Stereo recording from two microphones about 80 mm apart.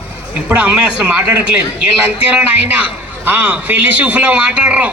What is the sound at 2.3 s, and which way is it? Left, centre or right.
A man's voice, centre.